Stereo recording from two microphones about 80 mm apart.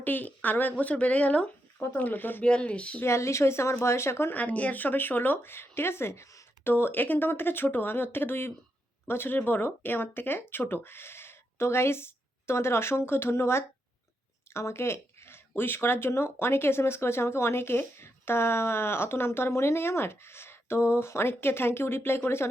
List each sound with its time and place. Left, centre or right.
0.0 s speech: left
2.4 s speech: centre
3.0 s speech: left
4.4 s speech: centre